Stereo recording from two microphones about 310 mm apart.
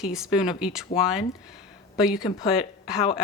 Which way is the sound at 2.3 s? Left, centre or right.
Centre.